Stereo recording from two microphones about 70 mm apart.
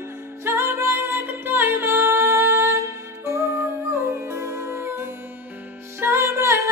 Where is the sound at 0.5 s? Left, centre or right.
Right.